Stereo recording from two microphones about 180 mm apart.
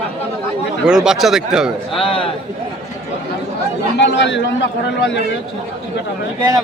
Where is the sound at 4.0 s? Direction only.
85° left.